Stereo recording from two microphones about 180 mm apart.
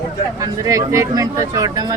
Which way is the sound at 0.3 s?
20° right (ahead or behind).